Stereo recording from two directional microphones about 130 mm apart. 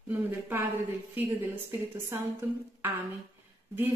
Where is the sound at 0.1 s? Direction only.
15° right (ahead or behind).